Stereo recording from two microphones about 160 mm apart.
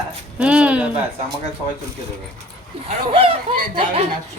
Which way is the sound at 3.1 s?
35° right (ahead or behind).